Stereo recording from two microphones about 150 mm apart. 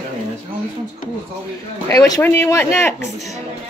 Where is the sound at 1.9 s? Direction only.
20° left (ahead or behind).